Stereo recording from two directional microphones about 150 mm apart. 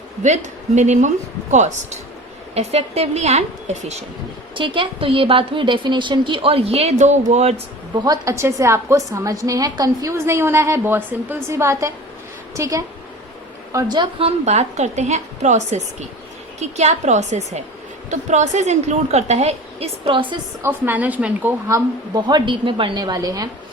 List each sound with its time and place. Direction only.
0.8 s a woman's voice: 50° right (ahead or behind)
4.5 s a woman's voice: 35° right (ahead or behind)
7.9 s a woman's voice: 25° right (ahead or behind); by 20.2 s 40° right (ahead or behind)
20.6 s speech: 15° right (ahead or behind)
21.7 s a woman's voice: 25° right (ahead or behind)